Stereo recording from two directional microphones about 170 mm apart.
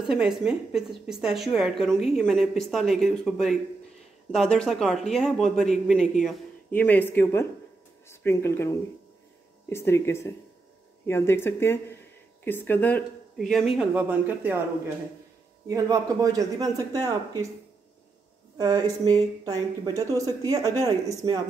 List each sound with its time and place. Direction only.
0.0 s a woman's voice: 5° right (ahead or behind)
13.5 s speech: centre (ahead or behind)
15.7 s speech: 20° right (ahead or behind)
18.6 s speech: 20° right (ahead or behind)